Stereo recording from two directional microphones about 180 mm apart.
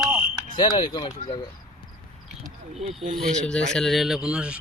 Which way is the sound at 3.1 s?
Centre (ahead or behind).